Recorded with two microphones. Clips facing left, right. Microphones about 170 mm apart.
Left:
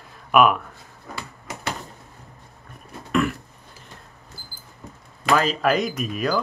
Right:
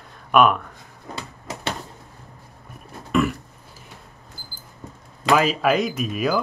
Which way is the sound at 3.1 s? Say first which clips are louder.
Right 1 dB; centre (ahead or behind).